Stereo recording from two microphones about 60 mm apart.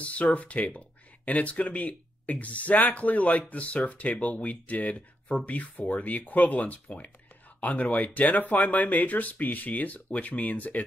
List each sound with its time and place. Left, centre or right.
0.0 s speech: left